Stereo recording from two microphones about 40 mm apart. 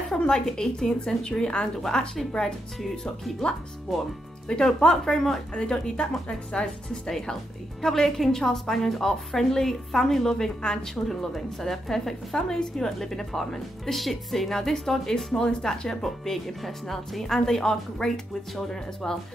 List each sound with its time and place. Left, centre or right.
0.1 s speech: centre
1.8 s speech: centre
4.7 s speech: centre
7.1 s speech: centre
11.1 s speech: centre
15.4 s speech: left